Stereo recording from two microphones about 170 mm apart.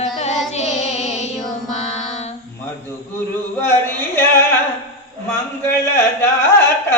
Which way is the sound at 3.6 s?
15° left (ahead or behind).